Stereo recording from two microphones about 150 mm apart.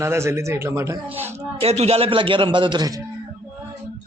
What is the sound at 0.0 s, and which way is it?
Speech, 15° right (ahead or behind).